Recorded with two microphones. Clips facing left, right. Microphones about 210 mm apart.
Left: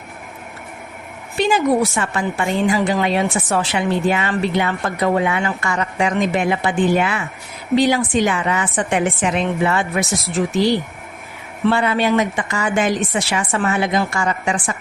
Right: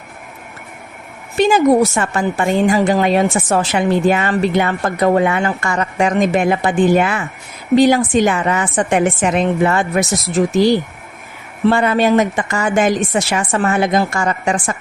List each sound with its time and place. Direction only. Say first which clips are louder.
1.4 s a woman's voice: right 5 dB; 45° right (ahead or behind)
11.6 s a woman's voice: right 4 dB; 45° right (ahead or behind)